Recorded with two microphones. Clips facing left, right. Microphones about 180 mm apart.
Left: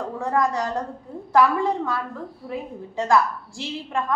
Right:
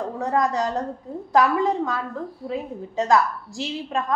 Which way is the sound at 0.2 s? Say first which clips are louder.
Right 1 dB; 20° right (ahead or behind).